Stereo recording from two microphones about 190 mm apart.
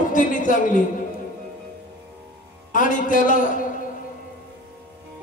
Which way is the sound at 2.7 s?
45° left (ahead or behind).